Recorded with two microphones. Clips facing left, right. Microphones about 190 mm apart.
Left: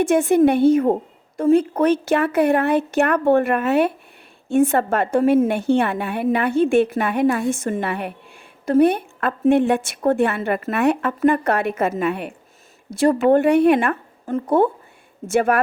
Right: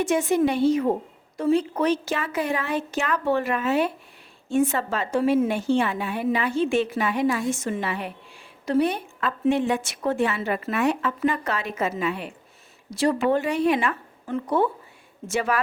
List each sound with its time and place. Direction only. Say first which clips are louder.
0.0 s a woman's voice: left 6 dB; 55° left (ahead or behind)